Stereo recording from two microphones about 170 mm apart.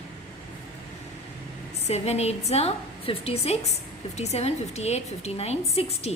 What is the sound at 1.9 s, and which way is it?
A woman's voice, 40° left (ahead or behind).